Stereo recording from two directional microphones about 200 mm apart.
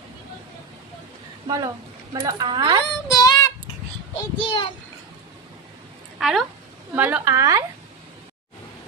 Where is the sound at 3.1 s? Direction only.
15° left (ahead or behind).